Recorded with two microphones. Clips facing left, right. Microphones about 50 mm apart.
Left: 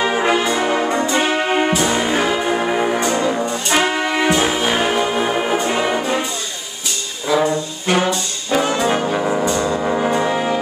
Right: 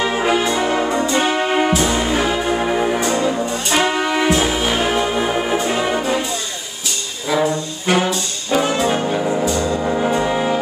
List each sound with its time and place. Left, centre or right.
0.0 s brass instrument: centre
1.1 s music: centre
7.3 s brass instrument: centre
9.1 s music: centre
9.7 s brass instrument: centre